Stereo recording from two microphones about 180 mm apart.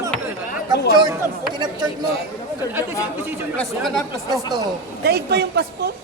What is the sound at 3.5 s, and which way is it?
Speech, centre (ahead or behind).